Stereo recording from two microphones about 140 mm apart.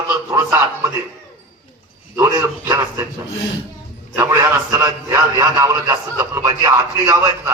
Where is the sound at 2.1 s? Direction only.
25° right (ahead or behind).